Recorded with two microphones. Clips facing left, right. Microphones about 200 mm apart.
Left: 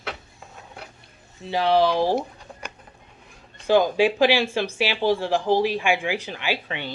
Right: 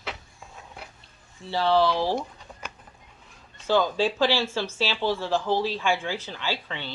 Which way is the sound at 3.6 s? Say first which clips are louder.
Left 5 dB; 15° left (ahead or behind).